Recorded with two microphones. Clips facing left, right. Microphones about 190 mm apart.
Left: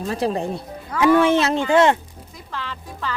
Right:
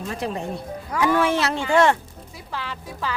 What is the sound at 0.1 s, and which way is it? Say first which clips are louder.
Speech: left 6 dB; 35° left (ahead or behind).